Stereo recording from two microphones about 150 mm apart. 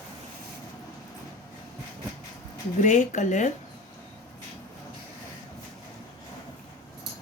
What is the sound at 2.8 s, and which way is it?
Speech, 55° left (ahead or behind).